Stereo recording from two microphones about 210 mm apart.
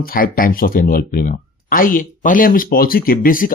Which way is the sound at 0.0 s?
45° left (ahead or behind).